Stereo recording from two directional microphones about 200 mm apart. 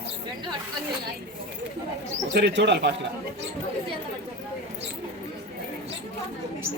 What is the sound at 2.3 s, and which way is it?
Speech, 60° right (ahead or behind).